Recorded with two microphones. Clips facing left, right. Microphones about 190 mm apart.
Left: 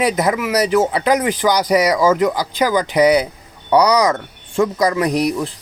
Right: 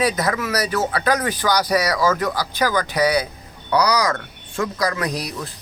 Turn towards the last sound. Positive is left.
turn(degrees=20)  # may be behind; listen again after turning